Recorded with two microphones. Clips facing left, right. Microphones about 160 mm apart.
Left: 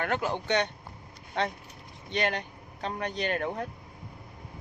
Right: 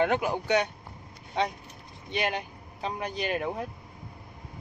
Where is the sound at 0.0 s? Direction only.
15° right (ahead or behind).